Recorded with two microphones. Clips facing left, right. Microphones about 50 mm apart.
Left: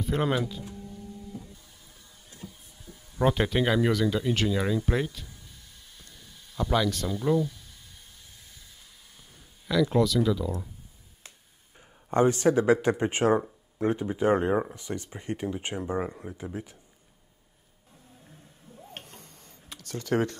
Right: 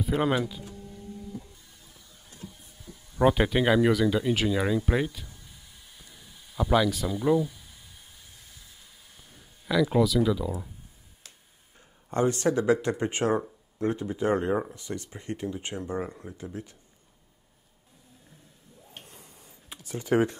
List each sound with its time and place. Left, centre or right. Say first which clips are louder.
0.0 s speech: right 1 dB; centre
3.2 s speech: right 2 dB; centre
5.9 s a sound: even; centre
9.3 s speech: right 1 dB; centre
12.1 s speech: left 3 dB; left
19.0 s a sound: left 1 dB; centre